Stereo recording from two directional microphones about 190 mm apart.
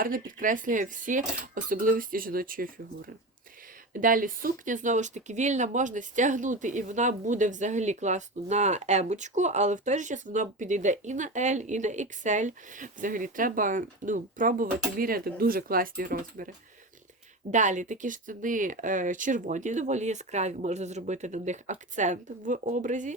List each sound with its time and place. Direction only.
0.0 s speech: 45° right (ahead or behind)
3.9 s speech: 45° right (ahead or behind)